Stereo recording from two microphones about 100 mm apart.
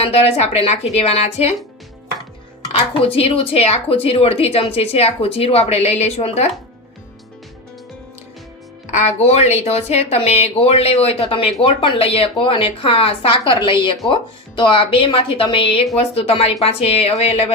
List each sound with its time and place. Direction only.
0.0 s a woman's voice: 75° left (ahead or behind); by 1.5 s 90° left
2.7 s speech: 70° left (ahead or behind); by 6.5 s 90° left
9.0 s a woman's voice: 90° left
11.6 s speech: 60° left (ahead or behind)
13.5 s speech: 55° left (ahead or behind)
16.0 s a woman's voice: 80° left